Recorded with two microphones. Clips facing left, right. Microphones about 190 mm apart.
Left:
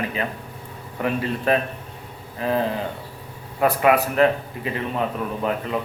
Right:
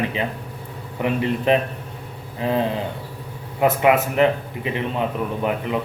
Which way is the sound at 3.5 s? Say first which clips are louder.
Right 1 dB; 20° right (ahead or behind).